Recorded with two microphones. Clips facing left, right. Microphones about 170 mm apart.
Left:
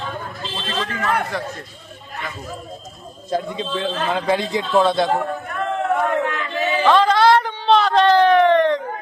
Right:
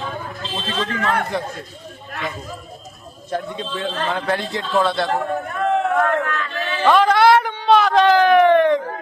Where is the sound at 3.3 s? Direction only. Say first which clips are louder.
Left 2 dB; 10° left (ahead or behind).